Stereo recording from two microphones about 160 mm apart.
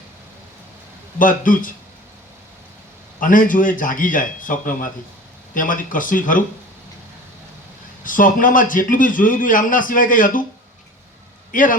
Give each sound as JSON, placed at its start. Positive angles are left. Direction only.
{"t": 1.2, "sound": "a man's voice", "side_deg": 55}
{"t": 3.2, "sound": "a man's voice", "side_deg": 55}
{"t": 8.0, "sound": "a man's voice", "side_deg": 55}
{"t": 11.5, "sound": "a man's voice", "side_deg": 60}